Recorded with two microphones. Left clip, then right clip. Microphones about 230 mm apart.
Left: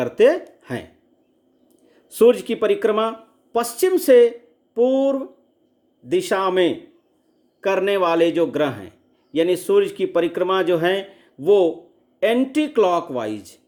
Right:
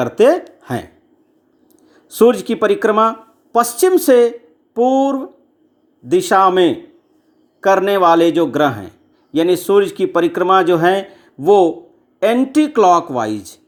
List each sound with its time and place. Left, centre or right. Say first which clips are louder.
0.0 s a man's voice: right 4 dB; centre